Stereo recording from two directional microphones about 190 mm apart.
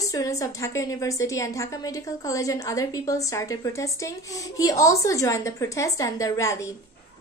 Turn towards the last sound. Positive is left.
turn(degrees=15)  # may be behind; listen again after turning